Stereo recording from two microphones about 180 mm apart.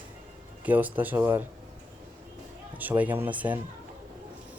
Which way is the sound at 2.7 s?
10° right (ahead or behind).